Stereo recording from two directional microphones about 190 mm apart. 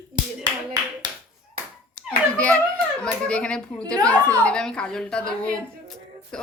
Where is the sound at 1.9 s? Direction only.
5° left (ahead or behind).